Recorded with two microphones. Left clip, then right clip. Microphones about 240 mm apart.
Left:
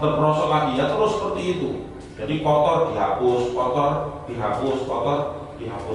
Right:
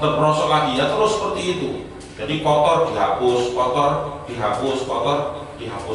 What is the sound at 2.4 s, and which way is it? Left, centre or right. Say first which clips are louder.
Mantra: right 2 dB; left.